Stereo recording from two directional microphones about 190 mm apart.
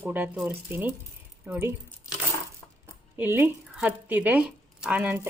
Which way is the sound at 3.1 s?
10° right (ahead or behind).